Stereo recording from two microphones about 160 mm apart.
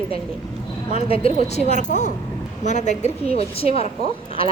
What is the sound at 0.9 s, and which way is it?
A woman's voice, 35° left (ahead or behind).